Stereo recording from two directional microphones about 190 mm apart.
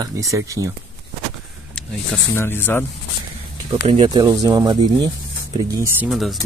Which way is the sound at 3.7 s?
30° right (ahead or behind).